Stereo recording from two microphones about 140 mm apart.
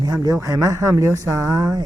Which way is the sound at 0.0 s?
25° right (ahead or behind).